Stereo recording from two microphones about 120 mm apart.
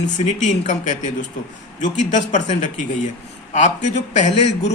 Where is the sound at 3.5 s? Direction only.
80° left.